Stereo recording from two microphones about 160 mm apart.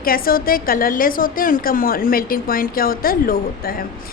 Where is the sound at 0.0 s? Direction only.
65° left (ahead or behind).